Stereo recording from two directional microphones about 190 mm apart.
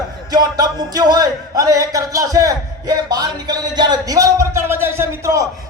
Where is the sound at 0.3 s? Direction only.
20° right (ahead or behind).